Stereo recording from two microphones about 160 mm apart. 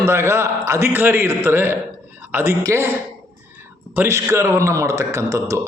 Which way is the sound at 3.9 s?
15° right (ahead or behind).